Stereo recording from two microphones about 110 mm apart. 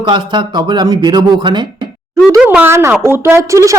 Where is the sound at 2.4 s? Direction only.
20° right (ahead or behind).